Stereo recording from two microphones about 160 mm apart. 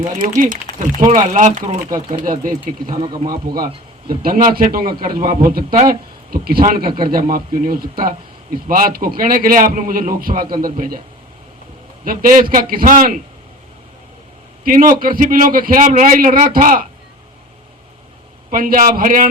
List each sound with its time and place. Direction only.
0.1 s a man's voice: 55° right (ahead or behind)
2.9 s speech: 30° right (ahead or behind)
3.2 s a man's voice: 60° right (ahead or behind)
7.3 s a man's voice: 60° right (ahead or behind)
12.0 s a man's voice: 65° right (ahead or behind)
14.6 s a man's voice: 60° right (ahead or behind)
18.5 s a man's voice: 60° right (ahead or behind)